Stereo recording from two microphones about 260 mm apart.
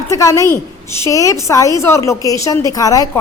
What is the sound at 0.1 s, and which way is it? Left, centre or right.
A woman's voice, centre.